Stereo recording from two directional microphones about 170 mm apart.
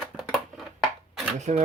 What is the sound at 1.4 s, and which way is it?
Speech, 45° right (ahead or behind).